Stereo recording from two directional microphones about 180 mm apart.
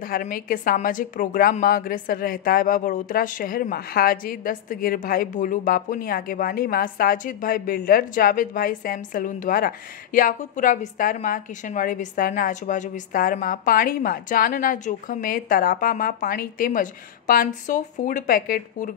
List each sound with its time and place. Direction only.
0.0 s a woman's voice: 50° left (ahead or behind)